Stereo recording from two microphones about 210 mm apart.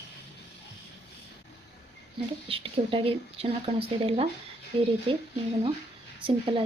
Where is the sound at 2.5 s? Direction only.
25° right (ahead or behind).